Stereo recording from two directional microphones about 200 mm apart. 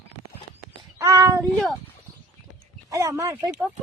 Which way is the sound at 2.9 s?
15° right (ahead or behind).